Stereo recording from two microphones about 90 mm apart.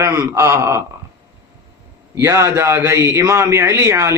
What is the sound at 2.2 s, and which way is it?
A man's voice, 30° right (ahead or behind).